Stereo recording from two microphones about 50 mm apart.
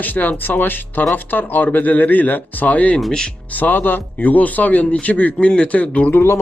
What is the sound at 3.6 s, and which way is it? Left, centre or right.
Speech, left.